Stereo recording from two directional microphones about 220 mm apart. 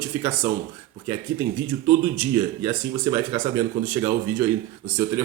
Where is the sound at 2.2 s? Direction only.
15° right (ahead or behind).